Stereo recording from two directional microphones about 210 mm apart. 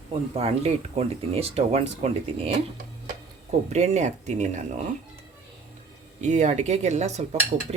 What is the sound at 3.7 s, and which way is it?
Speech, 30° right (ahead or behind).